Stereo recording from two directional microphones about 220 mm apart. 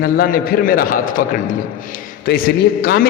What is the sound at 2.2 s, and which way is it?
Speech, 45° left (ahead or behind).